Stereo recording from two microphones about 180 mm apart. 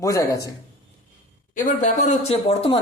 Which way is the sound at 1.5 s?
45° left (ahead or behind).